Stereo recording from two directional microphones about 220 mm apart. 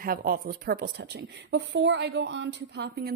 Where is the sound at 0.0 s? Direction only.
40° right (ahead or behind).